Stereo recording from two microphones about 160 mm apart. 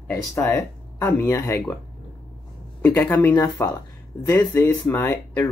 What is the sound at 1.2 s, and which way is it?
Speech, 20° left (ahead or behind).